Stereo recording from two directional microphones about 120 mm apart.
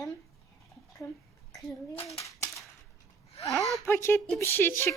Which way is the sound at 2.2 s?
25° left (ahead or behind).